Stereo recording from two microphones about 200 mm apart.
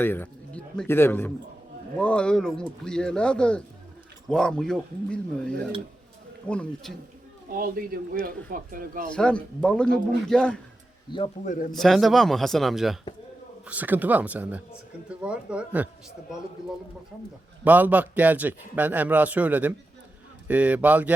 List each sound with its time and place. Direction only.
0.0 s a man's voice: 10° left (ahead or behind)
7.5 s speech: 45° right (ahead or behind)
9.1 s speech: 5° left (ahead or behind)
11.4 s speech: 40° left (ahead or behind)
11.7 s a man's voice: centre (ahead or behind)
17.6 s a man's voice: 10° right (ahead or behind)